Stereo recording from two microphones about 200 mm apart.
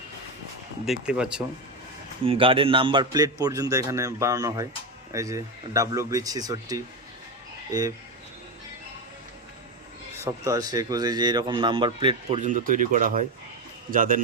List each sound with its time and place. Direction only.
0.9 s speech: 5° right (ahead or behind)
2.2 s a man's voice: 25° right (ahead or behind)
10.2 s a man's voice: 15° right (ahead or behind)
12.4 s a man's voice: 40° right (ahead or behind)